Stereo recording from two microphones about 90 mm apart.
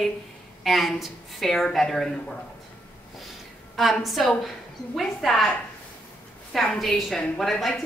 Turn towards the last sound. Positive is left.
turn(degrees=0)  # may be behind; listen again after turning